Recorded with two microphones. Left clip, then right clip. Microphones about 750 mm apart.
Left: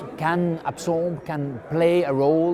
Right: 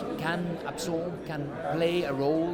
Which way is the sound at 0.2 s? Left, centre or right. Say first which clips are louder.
Left 13 dB; left.